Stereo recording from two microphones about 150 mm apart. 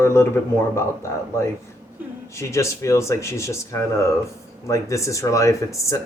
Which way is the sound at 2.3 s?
20° left (ahead or behind).